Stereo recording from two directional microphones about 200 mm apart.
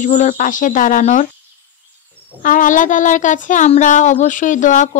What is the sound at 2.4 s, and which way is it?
Speech, 40° left (ahead or behind).